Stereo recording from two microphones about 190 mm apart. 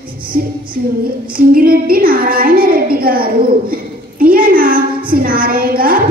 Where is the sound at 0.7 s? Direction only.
50° right (ahead or behind).